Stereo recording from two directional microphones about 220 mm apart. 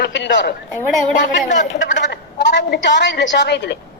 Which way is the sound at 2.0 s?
50° left (ahead or behind).